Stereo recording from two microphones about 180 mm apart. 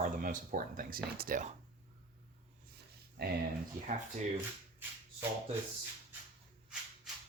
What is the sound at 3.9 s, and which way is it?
Speech, 45° right (ahead or behind).